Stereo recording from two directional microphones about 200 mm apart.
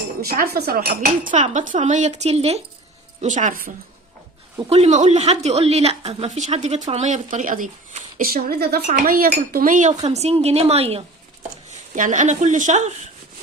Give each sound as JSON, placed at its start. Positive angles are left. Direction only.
{"t": 0.2, "sound": "speech", "side_deg": -50}
{"t": 1.3, "sound": "a woman's voice", "side_deg": -35}
{"t": 4.7, "sound": "a woman's voice", "side_deg": -35}